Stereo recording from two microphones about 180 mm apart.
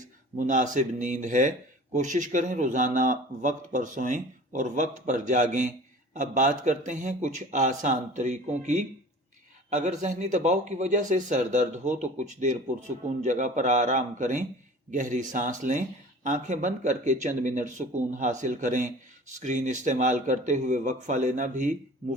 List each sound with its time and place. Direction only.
0.3 s speech: 45° right (ahead or behind)